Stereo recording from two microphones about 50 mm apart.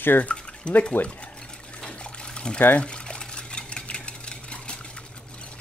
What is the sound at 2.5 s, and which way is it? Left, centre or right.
Speech, left.